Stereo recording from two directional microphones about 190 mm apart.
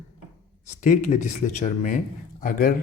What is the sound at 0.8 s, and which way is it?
Speech, 40° left (ahead or behind).